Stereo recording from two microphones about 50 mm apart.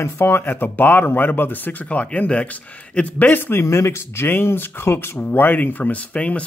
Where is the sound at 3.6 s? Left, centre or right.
Left.